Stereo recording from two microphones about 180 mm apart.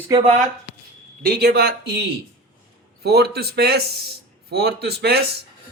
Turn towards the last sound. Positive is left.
turn(degrees=-60)  # may be behind; listen again after turning